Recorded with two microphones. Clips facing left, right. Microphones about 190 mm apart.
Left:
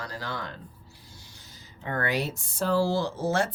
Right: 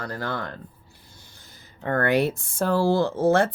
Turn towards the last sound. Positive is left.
turn(degrees=-55)  # may be behind; listen again after turning